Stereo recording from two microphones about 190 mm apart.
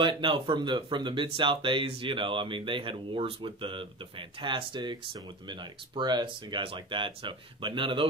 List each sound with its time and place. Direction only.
0.0 s speech: 25° right (ahead or behind)